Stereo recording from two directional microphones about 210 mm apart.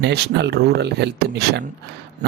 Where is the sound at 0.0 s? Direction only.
55° right (ahead or behind).